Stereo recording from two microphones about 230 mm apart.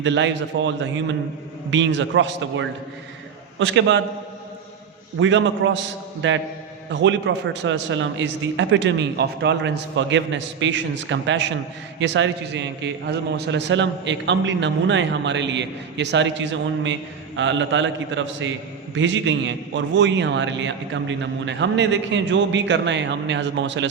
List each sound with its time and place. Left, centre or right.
0.0 s a man's voice: right
5.2 s a man's voice: right